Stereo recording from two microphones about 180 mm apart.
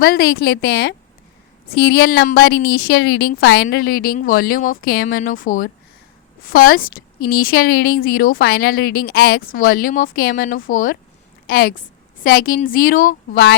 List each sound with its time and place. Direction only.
0.0 s a woman's voice: 60° left (ahead or behind)